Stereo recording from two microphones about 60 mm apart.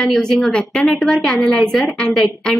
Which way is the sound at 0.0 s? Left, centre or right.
Centre.